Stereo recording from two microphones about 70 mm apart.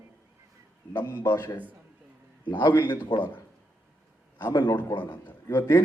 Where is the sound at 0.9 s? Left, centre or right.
Left.